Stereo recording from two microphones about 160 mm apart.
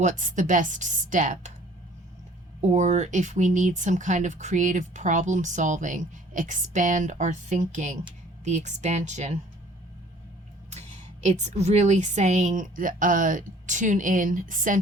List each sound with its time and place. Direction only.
0.0 s speech: 50° right (ahead or behind)
2.6 s speech: 45° right (ahead or behind)
10.7 s speech: 45° right (ahead or behind)